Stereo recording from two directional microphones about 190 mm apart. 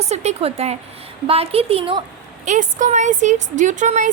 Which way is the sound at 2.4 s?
40° right (ahead or behind).